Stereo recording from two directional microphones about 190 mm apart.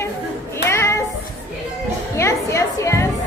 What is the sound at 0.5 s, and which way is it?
Child singing, 15° left (ahead or behind).